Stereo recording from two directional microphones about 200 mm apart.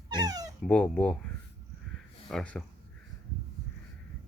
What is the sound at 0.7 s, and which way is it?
Speech, 5° left (ahead or behind).